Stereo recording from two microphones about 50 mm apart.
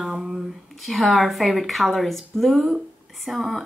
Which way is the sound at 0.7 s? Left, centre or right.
Centre.